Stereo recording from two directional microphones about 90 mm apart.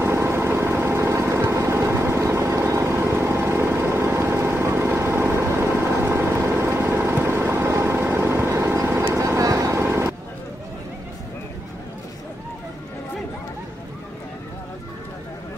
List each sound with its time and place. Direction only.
0.0 s vehicle: 30° right (ahead or behind)